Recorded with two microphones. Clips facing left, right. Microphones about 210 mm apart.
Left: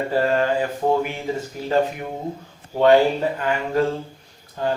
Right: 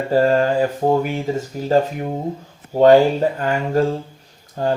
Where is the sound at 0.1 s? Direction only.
40° right (ahead or behind).